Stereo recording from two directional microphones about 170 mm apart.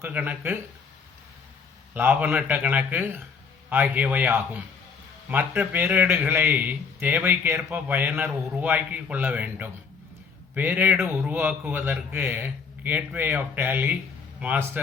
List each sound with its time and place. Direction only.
0.0 s a man's voice: 10° right (ahead or behind)
1.9 s a man's voice: 10° right (ahead or behind)